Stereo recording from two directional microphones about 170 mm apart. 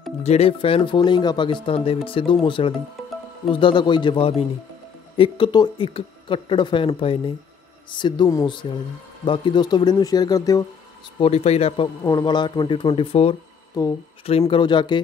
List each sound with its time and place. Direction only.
0.2 s speech: 35° left (ahead or behind); by 10.6 s 20° left (ahead or behind)
11.1 s speech: 35° left (ahead or behind)
12.0 s speech: 20° left (ahead or behind)
13.8 s speech: 20° left (ahead or behind)